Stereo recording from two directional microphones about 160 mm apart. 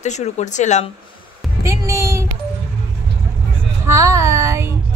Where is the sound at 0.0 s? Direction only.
45° left (ahead or behind).